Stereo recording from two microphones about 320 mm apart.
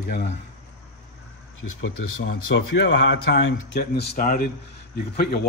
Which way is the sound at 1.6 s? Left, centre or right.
Left.